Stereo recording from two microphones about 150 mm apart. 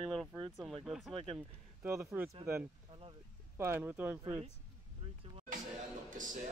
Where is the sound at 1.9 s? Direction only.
20° right (ahead or behind).